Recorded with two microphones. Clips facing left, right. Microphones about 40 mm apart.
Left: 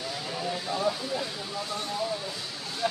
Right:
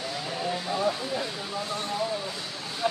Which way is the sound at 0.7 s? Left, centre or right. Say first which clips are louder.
Even; centre.